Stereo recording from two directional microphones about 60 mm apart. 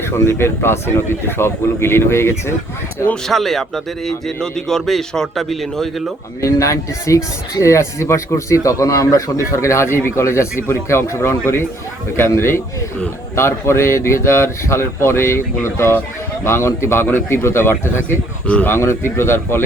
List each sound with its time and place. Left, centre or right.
0.3 s speech: left
3.2 s speech: centre
6.4 s speech: left
18.4 s speech: left
18.7 s speech: left